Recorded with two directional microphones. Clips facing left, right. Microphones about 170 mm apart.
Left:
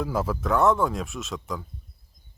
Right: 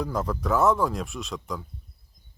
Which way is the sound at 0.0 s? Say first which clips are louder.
Left 1 dB; 5° left (ahead or behind).